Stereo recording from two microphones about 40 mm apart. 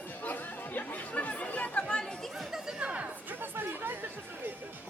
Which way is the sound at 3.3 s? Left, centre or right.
Right.